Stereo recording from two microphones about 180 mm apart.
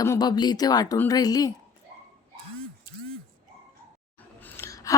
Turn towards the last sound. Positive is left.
turn(degrees=20)  # may be behind; listen again after turning